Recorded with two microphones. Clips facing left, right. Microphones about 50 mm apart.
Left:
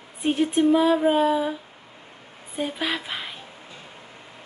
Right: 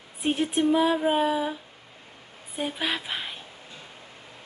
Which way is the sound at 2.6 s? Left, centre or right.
Centre.